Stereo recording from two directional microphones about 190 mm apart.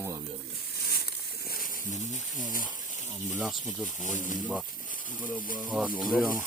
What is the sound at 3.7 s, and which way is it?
Speech, 40° left (ahead or behind).